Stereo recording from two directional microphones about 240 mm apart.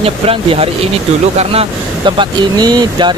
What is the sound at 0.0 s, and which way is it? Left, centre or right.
Speech, right.